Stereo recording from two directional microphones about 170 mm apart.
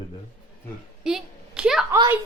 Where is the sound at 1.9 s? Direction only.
15° right (ahead or behind).